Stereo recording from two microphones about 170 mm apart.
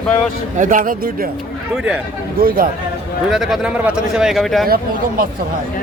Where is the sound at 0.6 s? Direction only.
50° right (ahead or behind).